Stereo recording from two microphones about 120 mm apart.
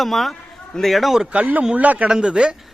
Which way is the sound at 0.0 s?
Centre (ahead or behind).